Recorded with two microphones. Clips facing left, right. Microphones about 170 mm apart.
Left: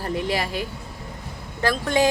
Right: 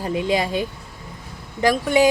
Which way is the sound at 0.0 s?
15° right (ahead or behind).